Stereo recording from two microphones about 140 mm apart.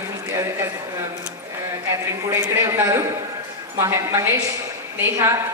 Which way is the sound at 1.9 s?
20° right (ahead or behind).